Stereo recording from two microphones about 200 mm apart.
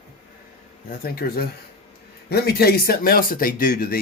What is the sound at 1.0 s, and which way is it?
Speech, 50° left (ahead or behind).